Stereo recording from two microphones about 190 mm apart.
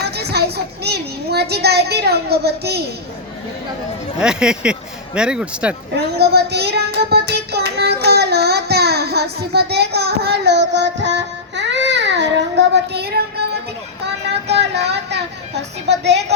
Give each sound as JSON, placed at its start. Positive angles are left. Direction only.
{"t": 0.0, "sound": "child singing", "side_deg": -60}
{"t": 4.2, "sound": "speech", "side_deg": -5}
{"t": 6.1, "sound": "child singing", "side_deg": -60}
{"t": 14.5, "sound": "a sound", "side_deg": -60}
{"t": 15.9, "sound": "a woman's voice", "side_deg": -65}